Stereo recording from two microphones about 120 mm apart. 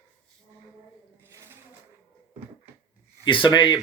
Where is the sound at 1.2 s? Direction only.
20° right (ahead or behind).